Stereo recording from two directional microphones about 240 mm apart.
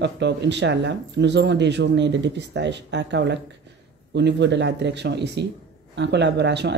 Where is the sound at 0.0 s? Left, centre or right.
Right.